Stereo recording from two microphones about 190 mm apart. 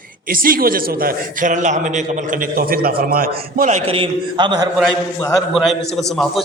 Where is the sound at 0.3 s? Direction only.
50° right (ahead or behind); by 4.7 s 25° right (ahead or behind).